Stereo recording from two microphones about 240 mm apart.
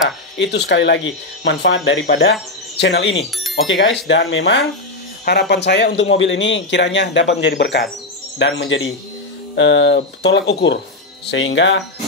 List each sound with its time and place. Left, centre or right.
0.4 s speech: left